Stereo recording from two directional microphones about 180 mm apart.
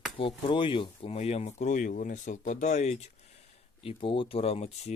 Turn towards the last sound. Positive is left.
turn(degrees=35)  # may be behind; listen again after turning